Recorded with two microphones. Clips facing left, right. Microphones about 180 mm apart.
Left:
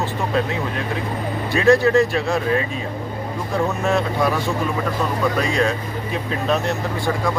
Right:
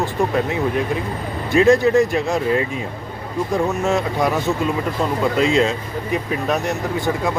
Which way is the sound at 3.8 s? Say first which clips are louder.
Right 1 dB; 20° right (ahead or behind).